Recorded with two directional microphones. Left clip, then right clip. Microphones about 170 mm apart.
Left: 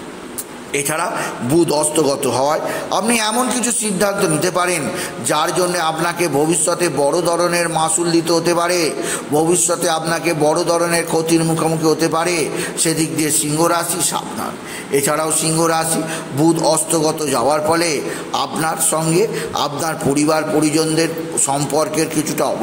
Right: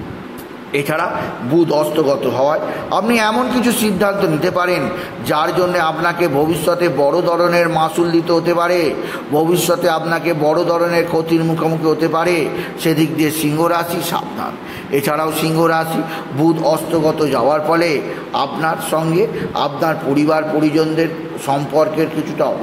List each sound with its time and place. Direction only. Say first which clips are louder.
0.7 s a man's voice: right 2 dB; 15° left (ahead or behind)
2.9 s a man's voice: right 3 dB; 10° left (ahead or behind)